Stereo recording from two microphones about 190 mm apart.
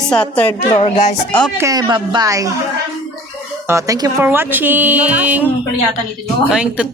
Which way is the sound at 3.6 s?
15° right (ahead or behind).